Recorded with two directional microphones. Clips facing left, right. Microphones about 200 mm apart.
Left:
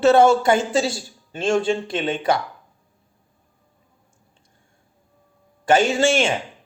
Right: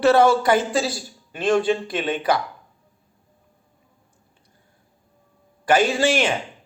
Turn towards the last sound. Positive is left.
turn(degrees=25)  # may be behind; listen again after turning